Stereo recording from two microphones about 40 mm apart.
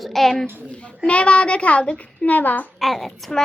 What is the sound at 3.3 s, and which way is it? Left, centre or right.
Speech, centre.